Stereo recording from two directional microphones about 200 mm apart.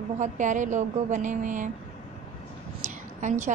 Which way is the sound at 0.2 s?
40° right (ahead or behind).